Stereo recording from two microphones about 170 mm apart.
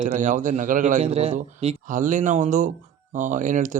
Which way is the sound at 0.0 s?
45° right (ahead or behind).